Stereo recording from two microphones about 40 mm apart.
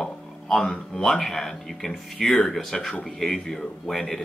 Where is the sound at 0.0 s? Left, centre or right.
Centre.